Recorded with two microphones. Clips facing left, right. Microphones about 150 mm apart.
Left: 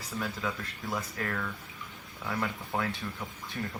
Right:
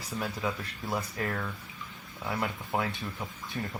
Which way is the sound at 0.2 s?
15° right (ahead or behind).